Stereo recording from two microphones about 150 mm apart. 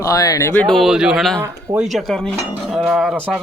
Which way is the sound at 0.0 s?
25° left (ahead or behind).